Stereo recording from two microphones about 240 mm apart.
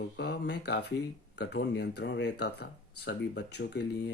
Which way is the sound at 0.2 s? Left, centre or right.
Left.